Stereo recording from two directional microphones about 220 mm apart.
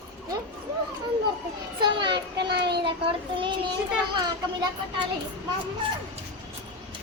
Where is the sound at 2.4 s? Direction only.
50° right (ahead or behind).